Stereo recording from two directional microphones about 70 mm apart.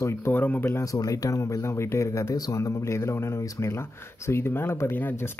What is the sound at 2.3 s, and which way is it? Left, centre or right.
Speech, left.